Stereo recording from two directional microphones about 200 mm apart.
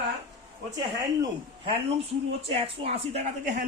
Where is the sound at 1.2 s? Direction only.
25° right (ahead or behind).